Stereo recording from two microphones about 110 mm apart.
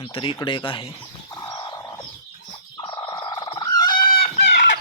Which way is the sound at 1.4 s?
40° left (ahead or behind).